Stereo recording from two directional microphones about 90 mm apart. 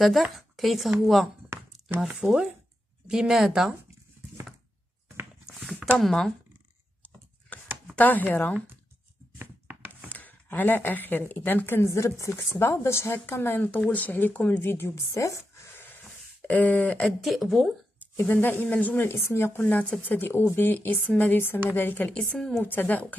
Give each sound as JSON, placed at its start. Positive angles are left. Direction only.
{"t": 0.0, "sound": "speech", "side_deg": 0}
{"t": 5.9, "sound": "speech", "side_deg": 5}
{"t": 7.5, "sound": "a sound", "side_deg": 15}
{"t": 7.9, "sound": "speech", "side_deg": 20}
{"t": 9.4, "sound": "a sound", "side_deg": -20}
{"t": 10.0, "sound": "speech", "side_deg": 15}
{"t": 17.0, "sound": "speech", "side_deg": 0}
{"t": 18.1, "sound": "speech", "side_deg": 20}
{"t": 19.6, "sound": "speech", "side_deg": 15}
{"t": 22.2, "sound": "speech", "side_deg": 5}
{"t": 22.6, "sound": "speech", "side_deg": 20}